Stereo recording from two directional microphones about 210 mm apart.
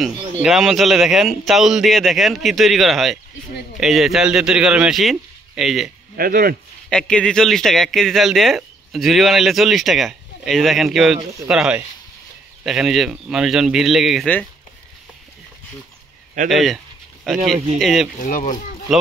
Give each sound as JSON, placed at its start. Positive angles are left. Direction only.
{"t": 0.0, "sound": "speech", "side_deg": 0}
{"t": 6.1, "sound": "speech", "side_deg": -45}
{"t": 6.9, "sound": "speech", "side_deg": 5}
{"t": 16.4, "sound": "speech", "side_deg": 0}
{"t": 18.2, "sound": "speech", "side_deg": 40}